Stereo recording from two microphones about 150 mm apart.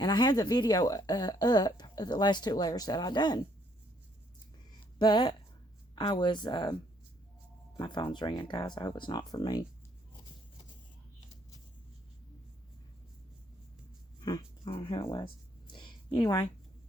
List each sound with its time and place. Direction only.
0.0 s speech: 30° left (ahead or behind)
4.9 s speech: 30° left (ahead or behind)
7.8 s speech: 30° left (ahead or behind)
14.2 s a sound: 25° left (ahead or behind)